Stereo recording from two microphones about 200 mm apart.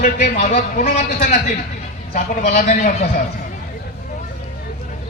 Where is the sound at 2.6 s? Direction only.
35° left (ahead or behind).